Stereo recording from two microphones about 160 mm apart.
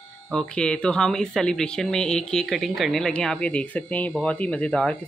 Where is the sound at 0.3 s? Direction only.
5° left (ahead or behind).